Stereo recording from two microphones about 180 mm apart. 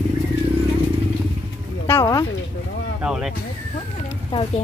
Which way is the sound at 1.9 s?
15° left (ahead or behind).